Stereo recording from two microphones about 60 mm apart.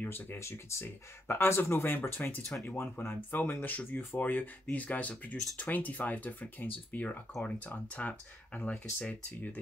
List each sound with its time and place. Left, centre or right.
0.4 s speech: left